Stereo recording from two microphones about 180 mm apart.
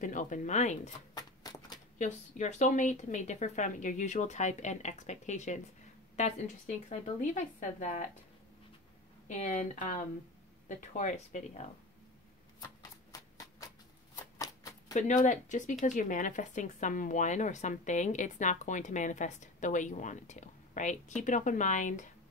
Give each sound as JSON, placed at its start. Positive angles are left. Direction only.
{"t": 0.0, "sound": "speech", "side_deg": 45}
{"t": 1.1, "sound": "a sound", "side_deg": 20}
{"t": 2.0, "sound": "a woman's voice", "side_deg": 40}
{"t": 6.9, "sound": "speech", "side_deg": 45}
{"t": 9.3, "sound": "speech", "side_deg": 40}
{"t": 12.5, "sound": "a sound", "side_deg": 20}
{"t": 14.1, "sound": "shuffling cards", "side_deg": 20}
{"t": 15.0, "sound": "speech", "side_deg": 45}